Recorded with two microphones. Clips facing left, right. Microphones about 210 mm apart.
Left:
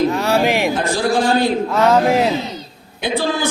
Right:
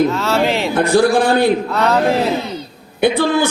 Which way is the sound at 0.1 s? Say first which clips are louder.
Even; 15° left (ahead or behind).